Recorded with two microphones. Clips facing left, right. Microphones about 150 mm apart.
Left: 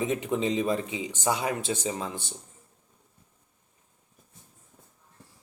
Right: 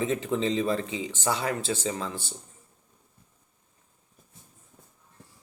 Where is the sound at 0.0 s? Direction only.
15° left (ahead or behind).